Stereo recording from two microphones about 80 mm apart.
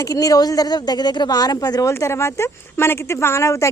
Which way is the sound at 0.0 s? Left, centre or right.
Left.